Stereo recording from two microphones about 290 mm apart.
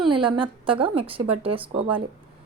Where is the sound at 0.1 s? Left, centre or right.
Centre.